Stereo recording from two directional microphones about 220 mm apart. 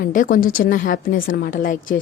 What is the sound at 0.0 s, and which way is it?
A woman's voice, 40° left (ahead or behind).